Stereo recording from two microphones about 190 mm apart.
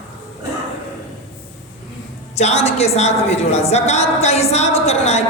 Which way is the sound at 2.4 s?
35° left (ahead or behind).